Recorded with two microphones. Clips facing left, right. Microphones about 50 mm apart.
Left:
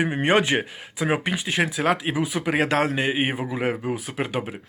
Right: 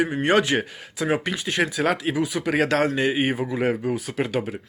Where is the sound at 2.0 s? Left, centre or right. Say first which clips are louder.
Right 1 dB; centre.